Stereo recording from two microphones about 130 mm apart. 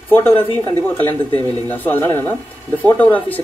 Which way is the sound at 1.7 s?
15° left (ahead or behind).